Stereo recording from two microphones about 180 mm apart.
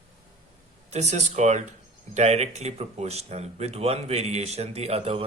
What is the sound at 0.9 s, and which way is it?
Speech, 40° right (ahead or behind).